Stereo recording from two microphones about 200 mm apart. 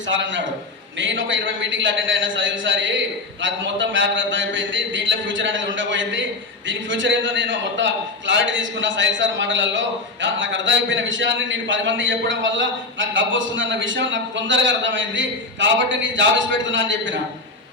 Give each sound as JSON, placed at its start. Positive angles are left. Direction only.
{"t": 0.1, "sound": "a man's voice", "side_deg": -65}